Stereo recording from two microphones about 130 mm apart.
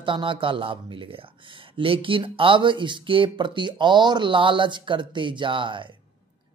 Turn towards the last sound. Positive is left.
turn(degrees=-40)  # may be behind; listen again after turning